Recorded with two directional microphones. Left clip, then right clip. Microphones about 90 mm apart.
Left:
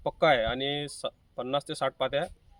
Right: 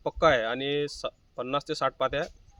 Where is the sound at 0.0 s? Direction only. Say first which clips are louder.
Right 1 dB; 20° right (ahead or behind).